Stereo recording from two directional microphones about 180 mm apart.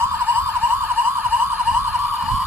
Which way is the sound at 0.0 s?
10° right (ahead or behind).